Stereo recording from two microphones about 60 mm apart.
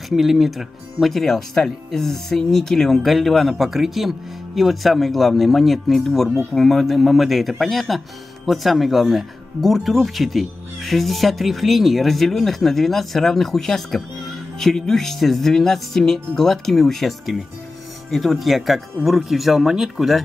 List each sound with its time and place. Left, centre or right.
0.1 s speech: centre